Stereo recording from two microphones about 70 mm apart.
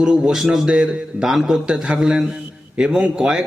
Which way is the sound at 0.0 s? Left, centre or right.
Centre.